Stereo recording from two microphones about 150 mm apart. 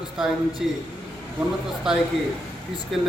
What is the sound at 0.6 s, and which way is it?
Speech, 5° right (ahead or behind).